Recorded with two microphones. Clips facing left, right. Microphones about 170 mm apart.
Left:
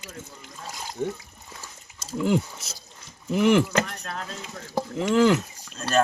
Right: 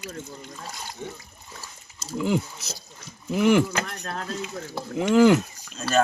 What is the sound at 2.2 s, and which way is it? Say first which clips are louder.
Speech: left 1 dB; centre (ahead or behind).